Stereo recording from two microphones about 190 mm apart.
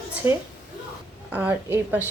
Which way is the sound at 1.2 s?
5° right (ahead or behind).